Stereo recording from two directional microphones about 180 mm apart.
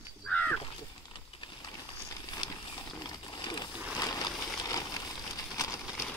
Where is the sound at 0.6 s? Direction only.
30° left (ahead or behind).